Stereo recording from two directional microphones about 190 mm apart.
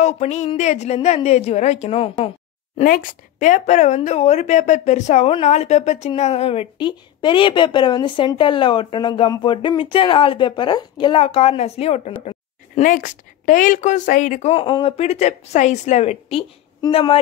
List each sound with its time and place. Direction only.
0.0 s a woman's voice: 35° left (ahead or behind)
2.8 s a woman's voice: 45° left (ahead or behind); by 17.2 s 30° left (ahead or behind)